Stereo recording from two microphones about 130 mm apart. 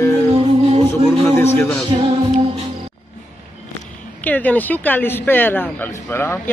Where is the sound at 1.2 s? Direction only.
20° left (ahead or behind).